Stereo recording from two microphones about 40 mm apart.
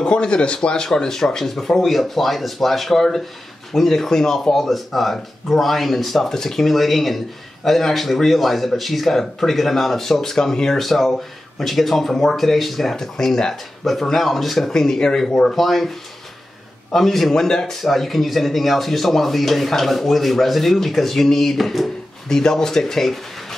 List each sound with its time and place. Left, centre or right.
0.0 s speech: left
0.8 s speech: centre
4.6 s speech: centre
10.8 s speech: centre